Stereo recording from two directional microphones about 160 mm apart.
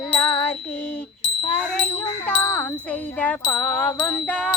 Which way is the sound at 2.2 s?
10° left (ahead or behind).